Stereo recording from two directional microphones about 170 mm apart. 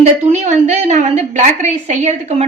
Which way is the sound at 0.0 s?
45° right (ahead or behind).